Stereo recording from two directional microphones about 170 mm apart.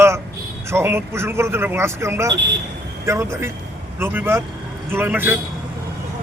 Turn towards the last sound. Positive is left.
turn(degrees=-10)  # may be behind; listen again after turning